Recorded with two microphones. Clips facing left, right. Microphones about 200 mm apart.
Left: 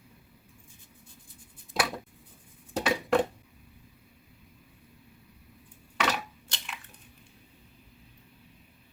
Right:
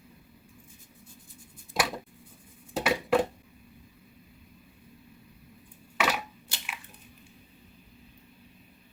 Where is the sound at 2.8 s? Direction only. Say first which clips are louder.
Even; 5° right (ahead or behind).